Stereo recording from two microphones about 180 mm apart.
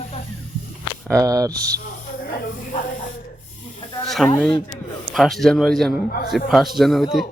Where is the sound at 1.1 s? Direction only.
20° right (ahead or behind).